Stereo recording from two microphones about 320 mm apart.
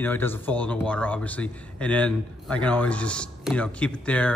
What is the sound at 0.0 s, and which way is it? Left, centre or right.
Speech, centre.